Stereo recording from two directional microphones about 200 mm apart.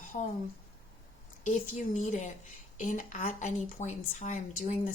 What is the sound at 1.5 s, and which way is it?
Speech, 40° left (ahead or behind).